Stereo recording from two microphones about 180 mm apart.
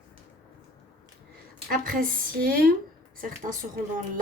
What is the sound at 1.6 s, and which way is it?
A woman's voice, 50° right (ahead or behind).